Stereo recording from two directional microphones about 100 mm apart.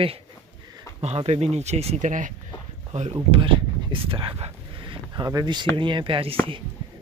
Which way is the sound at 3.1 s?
70° right (ahead or behind).